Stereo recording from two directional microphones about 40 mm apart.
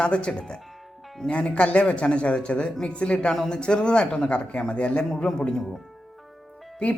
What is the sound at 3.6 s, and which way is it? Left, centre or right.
Speech, left.